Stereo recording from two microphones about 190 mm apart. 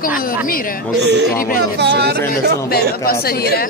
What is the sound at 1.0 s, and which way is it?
Speech, 65° right (ahead or behind).